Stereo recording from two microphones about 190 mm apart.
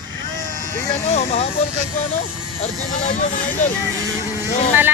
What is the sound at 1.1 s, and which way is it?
Speech, 35° left (ahead or behind).